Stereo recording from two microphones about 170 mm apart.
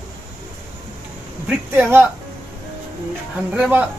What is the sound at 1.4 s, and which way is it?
Speech, 10° right (ahead or behind).